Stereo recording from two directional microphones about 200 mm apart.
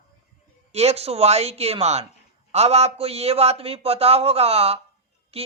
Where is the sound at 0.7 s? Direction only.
30° right (ahead or behind).